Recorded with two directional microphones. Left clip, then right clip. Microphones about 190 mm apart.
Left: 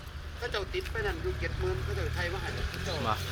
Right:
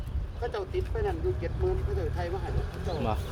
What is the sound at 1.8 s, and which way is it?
Speech, 60° right (ahead or behind).